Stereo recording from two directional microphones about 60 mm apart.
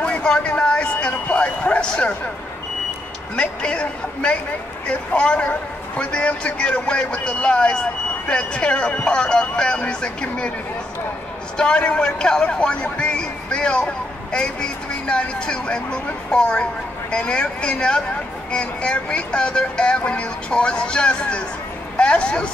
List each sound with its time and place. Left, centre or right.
0.0 s a sound: centre
3.3 s a man's voice: centre
11.5 s a man's voice: centre